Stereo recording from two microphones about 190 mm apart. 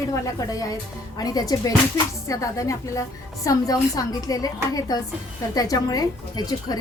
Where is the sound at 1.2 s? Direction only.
20° left (ahead or behind).